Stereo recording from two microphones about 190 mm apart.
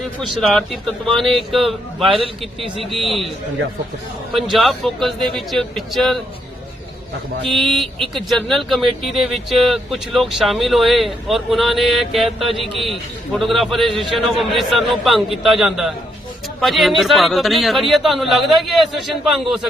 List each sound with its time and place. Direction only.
0.2 s speech: centre (ahead or behind)
2.6 s speech: 25° right (ahead or behind)
2.9 s speech: centre (ahead or behind)
4.4 s speech: centre (ahead or behind)
7.5 s speech: centre (ahead or behind)